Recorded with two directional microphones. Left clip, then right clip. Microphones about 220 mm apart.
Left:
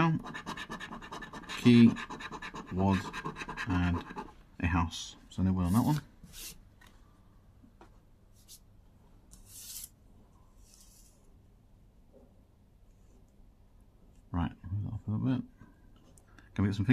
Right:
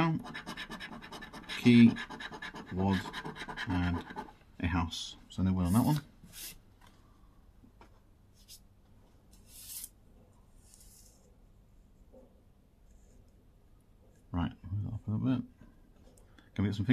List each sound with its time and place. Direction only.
0.3 s scratch: centre (ahead or behind)
1.6 s speech: 20° left (ahead or behind)
2.1 s scratch: centre (ahead or behind)
2.7 s scratch: 20° left (ahead or behind); by 6.0 s centre (ahead or behind)
14.3 s a sound: 10° left (ahead or behind)